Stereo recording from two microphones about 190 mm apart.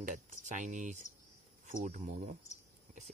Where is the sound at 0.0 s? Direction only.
40° right (ahead or behind).